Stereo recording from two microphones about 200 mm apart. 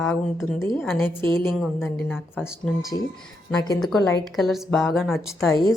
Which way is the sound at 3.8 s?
Centre (ahead or behind).